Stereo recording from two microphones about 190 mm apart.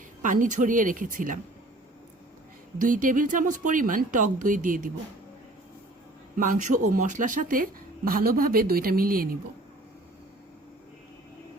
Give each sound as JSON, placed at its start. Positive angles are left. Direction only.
{"t": 0.2, "sound": "speech", "side_deg": -40}
{"t": 2.7, "sound": "speech", "side_deg": -45}
{"t": 6.3, "sound": "speech", "side_deg": -45}